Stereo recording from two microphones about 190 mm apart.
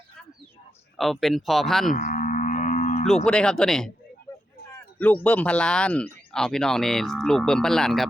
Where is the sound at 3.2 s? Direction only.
5° left (ahead or behind).